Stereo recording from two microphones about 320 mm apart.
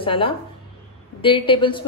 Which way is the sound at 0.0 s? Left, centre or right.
Centre.